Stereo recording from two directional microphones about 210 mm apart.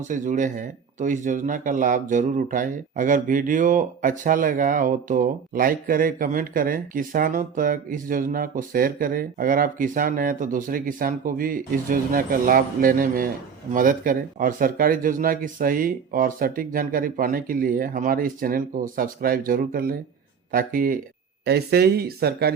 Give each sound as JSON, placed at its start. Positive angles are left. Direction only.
{"t": 0.0, "sound": "speech", "side_deg": -35}